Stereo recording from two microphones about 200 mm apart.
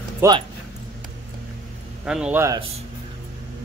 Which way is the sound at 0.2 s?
10° right (ahead or behind).